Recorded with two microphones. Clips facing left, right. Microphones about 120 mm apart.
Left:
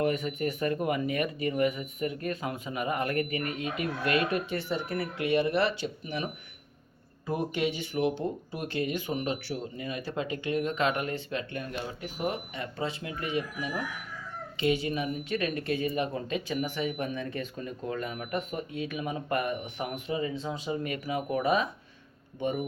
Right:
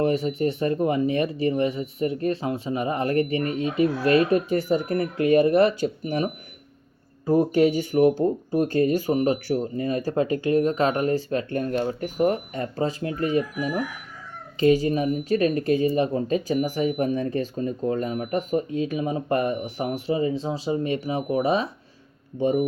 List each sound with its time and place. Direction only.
0.0 s speech: 30° right (ahead or behind)